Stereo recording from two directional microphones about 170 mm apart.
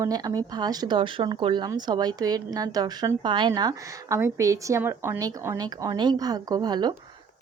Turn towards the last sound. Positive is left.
turn(degrees=-25)  # may be behind; listen again after turning